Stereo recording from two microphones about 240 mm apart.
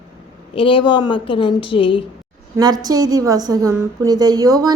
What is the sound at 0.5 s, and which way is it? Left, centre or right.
Speech, left.